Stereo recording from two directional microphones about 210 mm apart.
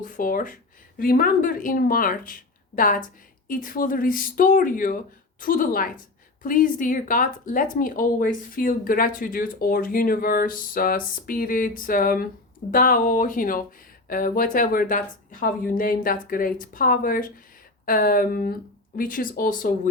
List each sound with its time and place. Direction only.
0.0 s speech: 40° left (ahead or behind)